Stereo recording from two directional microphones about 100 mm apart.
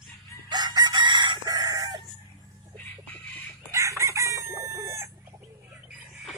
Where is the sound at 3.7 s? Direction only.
30° right (ahead or behind).